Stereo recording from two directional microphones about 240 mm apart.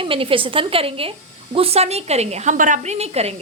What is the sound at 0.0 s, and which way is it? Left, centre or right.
A woman's voice, right.